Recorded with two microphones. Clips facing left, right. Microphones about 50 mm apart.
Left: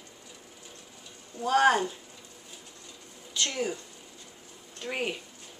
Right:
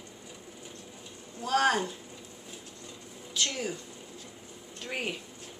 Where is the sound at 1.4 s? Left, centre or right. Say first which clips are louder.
Left 3 dB; centre.